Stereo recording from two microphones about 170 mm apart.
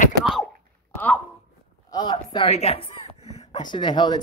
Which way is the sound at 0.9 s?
10° left (ahead or behind).